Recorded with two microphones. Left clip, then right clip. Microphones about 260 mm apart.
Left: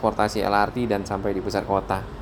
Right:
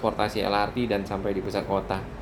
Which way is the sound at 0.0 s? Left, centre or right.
Left.